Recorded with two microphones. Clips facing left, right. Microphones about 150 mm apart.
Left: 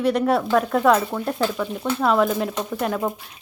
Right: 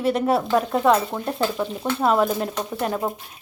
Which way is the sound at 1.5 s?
20° right (ahead or behind).